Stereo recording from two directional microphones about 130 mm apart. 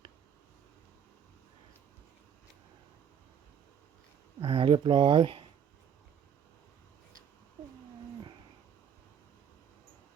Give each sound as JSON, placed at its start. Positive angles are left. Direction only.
{"t": 4.4, "sound": "speech", "side_deg": -45}